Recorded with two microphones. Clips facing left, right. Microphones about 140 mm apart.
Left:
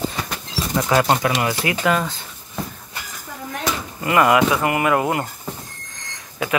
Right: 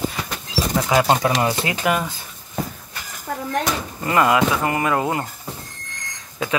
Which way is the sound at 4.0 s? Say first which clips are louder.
Left 2 dB; 20° left (ahead or behind).